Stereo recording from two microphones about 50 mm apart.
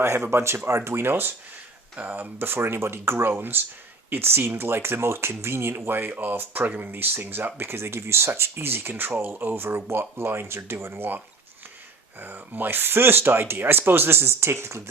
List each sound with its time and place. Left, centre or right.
0.3 s speech: right
2.0 s speech: right
9.6 s speech: right
12.2 s speech: right